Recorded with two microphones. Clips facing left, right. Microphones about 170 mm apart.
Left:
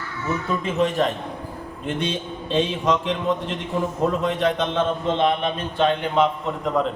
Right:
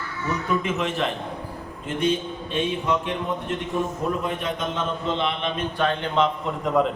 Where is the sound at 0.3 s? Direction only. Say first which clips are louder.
Even; 35° left (ahead or behind).